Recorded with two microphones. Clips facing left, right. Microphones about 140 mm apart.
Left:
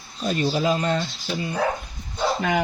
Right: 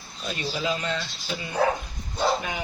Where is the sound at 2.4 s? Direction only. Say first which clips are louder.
Left 9 dB; 70° left (ahead or behind).